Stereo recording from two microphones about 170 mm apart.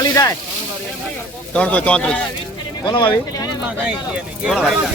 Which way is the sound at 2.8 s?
30° left (ahead or behind).